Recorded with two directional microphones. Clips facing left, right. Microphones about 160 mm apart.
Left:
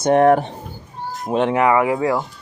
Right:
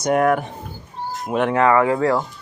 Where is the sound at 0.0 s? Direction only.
30° left (ahead or behind); by 2.2 s 15° left (ahead or behind).